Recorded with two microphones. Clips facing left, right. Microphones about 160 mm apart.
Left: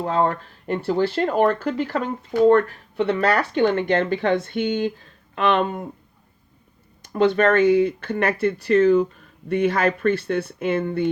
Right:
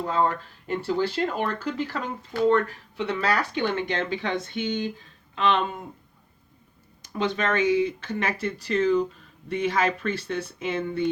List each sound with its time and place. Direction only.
0.0 s speech: 50° left (ahead or behind)
7.0 s speech: 60° left (ahead or behind)